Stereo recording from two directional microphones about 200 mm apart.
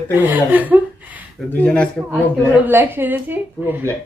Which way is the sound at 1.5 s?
5° left (ahead or behind).